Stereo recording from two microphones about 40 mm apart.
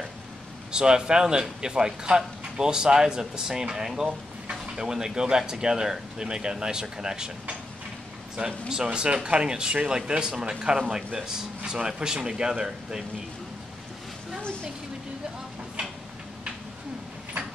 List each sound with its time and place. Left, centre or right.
0.7 s speech: centre
8.4 s speech: centre